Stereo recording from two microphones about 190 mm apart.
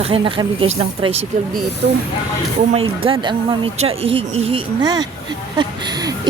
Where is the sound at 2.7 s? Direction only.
30° right (ahead or behind).